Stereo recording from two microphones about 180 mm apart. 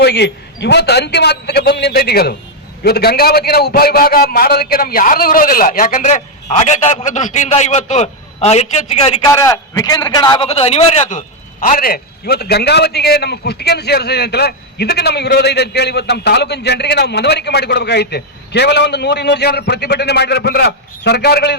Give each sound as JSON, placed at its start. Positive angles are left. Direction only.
{"t": 0.0, "sound": "a man's voice", "side_deg": 65}
{"t": 9.3, "sound": "a man's voice", "side_deg": 20}
{"t": 11.6, "sound": "a man's voice", "side_deg": 50}